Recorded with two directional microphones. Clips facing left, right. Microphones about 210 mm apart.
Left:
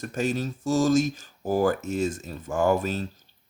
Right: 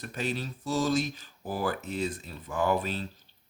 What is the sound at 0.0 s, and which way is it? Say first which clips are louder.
Speech: left 6 dB; 45° left (ahead or behind).